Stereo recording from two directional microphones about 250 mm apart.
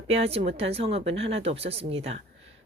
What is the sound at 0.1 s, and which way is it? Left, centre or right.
A woman's voice, right.